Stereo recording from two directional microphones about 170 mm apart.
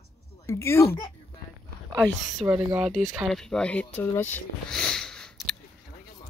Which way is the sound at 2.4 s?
25° right (ahead or behind).